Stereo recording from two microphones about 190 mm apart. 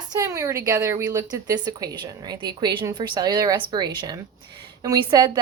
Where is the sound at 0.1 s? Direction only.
15° right (ahead or behind).